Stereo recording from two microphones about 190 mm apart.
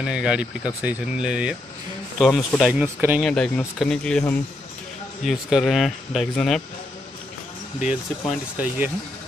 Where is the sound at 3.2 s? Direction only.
5° left (ahead or behind).